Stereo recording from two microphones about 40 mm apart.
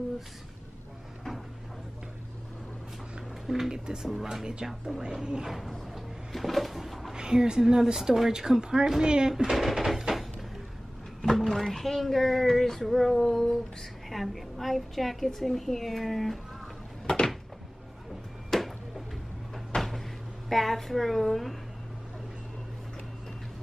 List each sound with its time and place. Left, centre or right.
3.4 s speech: centre
3.7 s speech: centre
5.0 s speech: right
5.4 s a sound: centre
7.2 s a woman's voice: centre
9.3 s a woman's voice: centre
11.1 s a woman's voice: centre
13.2 s female singing: centre
14.0 s a woman's voice: centre
17.0 s cupboard open or close: centre
18.5 s a sound: centre
19.7 s cupboard open or close: centre
20.4 s a woman's voice: centre